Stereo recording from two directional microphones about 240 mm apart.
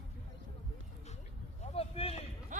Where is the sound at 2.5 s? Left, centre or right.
Right.